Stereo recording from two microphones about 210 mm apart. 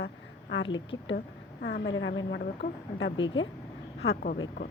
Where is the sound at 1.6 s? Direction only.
50° left (ahead or behind).